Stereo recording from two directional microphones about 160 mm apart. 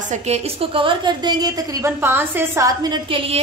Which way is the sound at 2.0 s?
15° right (ahead or behind).